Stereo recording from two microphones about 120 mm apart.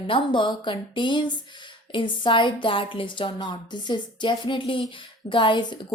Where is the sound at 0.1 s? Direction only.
40° left (ahead or behind).